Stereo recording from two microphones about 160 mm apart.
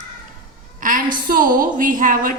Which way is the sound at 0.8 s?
55° right (ahead or behind).